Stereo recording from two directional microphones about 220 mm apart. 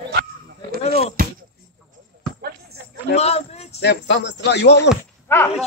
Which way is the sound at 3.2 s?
30° left (ahead or behind).